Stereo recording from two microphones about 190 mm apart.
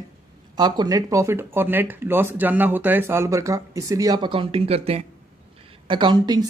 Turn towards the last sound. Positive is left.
turn(degrees=-20)  # may be behind; listen again after turning